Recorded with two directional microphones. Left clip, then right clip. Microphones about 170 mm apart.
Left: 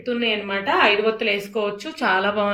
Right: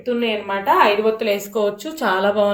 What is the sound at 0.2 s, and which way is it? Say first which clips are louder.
A woman's voice: right 1 dB; 35° right (ahead or behind).